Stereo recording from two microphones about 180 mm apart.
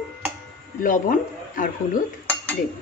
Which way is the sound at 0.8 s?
50° left (ahead or behind).